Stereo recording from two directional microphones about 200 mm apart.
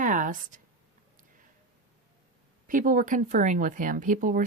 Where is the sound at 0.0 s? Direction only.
40° right (ahead or behind).